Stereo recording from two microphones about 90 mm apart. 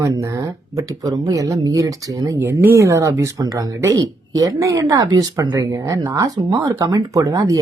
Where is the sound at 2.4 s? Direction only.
25° right (ahead or behind); by 3.8 s 45° right (ahead or behind).